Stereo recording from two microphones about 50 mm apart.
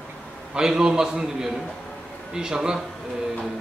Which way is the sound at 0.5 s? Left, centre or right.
Centre.